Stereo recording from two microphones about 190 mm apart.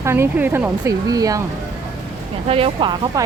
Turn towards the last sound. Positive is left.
turn(degrees=-25)  # may be behind; listen again after turning